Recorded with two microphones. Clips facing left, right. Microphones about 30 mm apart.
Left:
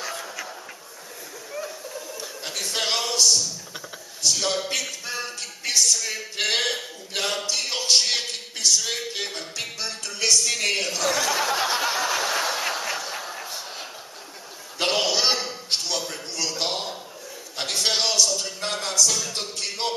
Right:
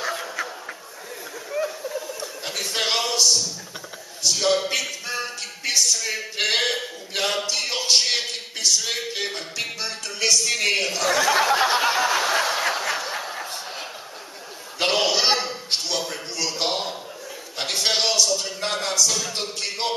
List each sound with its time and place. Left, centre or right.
0.0 s a sound: right
1.5 s chuckle: centre
4.2 s speech: centre
11.4 s snicker: centre
14.8 s a sound: centre
17.6 s speech: centre